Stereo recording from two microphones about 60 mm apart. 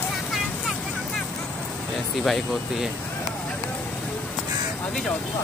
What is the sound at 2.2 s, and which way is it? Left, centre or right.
Speech, centre.